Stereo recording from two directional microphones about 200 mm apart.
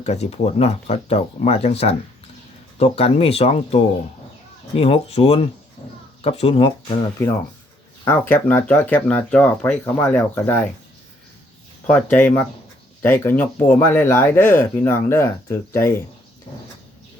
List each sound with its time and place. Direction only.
0.0 s speech: 30° left (ahead or behind)
5.8 s a sound: 15° left (ahead or behind)
6.2 s speech: 30° left (ahead or behind)
8.0 s speech: 10° left (ahead or behind)
11.9 s speech: 5° left (ahead or behind)